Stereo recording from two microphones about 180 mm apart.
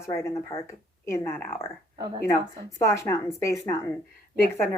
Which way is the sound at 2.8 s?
15° left (ahead or behind).